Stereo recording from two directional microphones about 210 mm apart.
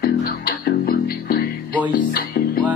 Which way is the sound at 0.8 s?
45° left (ahead or behind).